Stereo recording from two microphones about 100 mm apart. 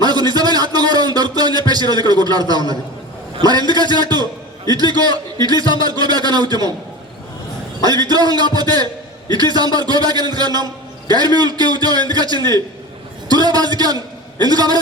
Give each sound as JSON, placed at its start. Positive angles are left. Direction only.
{"t": 0.0, "sound": "a sound", "side_deg": -45}
{"t": 1.7, "sound": "speech", "side_deg": -45}
{"t": 7.9, "sound": "a man's voice", "side_deg": -45}